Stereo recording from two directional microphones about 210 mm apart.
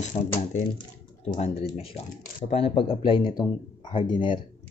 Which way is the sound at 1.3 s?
40° left (ahead or behind).